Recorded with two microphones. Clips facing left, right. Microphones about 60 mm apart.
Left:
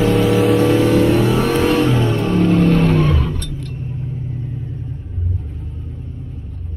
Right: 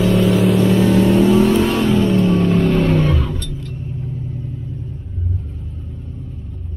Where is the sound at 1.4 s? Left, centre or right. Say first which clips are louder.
Right 1 dB; left.